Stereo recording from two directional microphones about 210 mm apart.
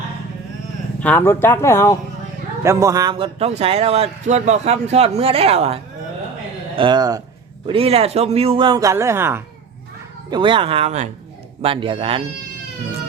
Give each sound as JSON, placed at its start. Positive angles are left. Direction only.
{"t": 0.9, "sound": "speech", "side_deg": 5}
{"t": 2.6, "sound": "speech", "side_deg": -15}
{"t": 10.2, "sound": "speech", "side_deg": -20}